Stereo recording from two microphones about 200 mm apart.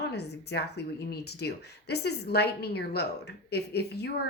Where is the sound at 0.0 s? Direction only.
55° left (ahead or behind).